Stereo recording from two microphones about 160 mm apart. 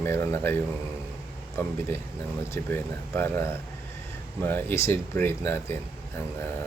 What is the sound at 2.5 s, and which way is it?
Speech, 15° left (ahead or behind).